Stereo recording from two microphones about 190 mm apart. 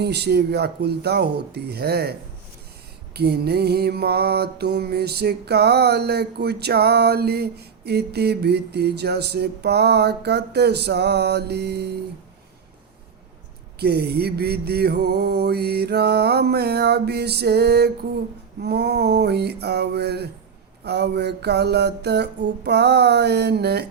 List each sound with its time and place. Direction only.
0.0 s music: 60° right (ahead or behind)
3.2 s music: 55° right (ahead or behind)
13.7 s music: 60° right (ahead or behind)